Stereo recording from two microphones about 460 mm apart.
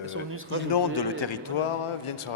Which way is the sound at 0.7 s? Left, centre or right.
Left.